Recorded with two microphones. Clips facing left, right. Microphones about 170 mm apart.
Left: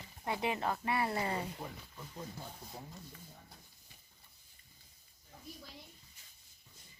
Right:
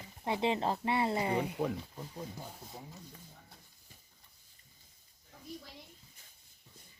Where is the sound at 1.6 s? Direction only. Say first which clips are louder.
Right 12 dB; 60° right (ahead or behind).